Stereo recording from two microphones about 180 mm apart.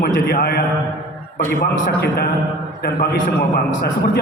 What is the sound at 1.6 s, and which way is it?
A man's voice, 60° left (ahead or behind).